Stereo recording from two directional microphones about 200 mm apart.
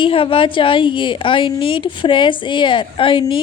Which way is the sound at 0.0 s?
25° left (ahead or behind).